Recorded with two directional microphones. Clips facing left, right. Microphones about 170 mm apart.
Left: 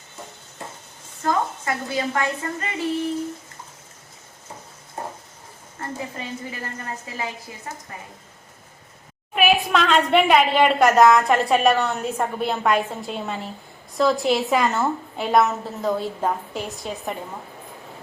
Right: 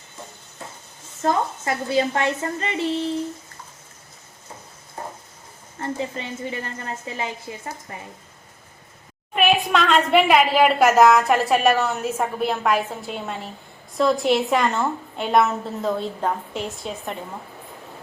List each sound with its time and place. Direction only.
1.2 s a woman's voice: 25° right (ahead or behind)
5.8 s a woman's voice: 25° right (ahead or behind)
9.3 s a woman's voice: centre (ahead or behind)